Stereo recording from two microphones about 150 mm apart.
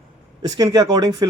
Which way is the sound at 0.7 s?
25° right (ahead or behind).